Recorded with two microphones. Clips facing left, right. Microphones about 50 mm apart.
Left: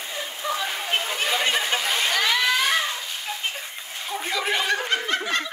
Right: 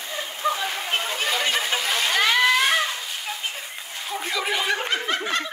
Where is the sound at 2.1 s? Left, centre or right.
Right.